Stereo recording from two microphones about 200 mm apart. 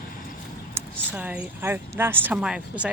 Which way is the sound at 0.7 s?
10° right (ahead or behind).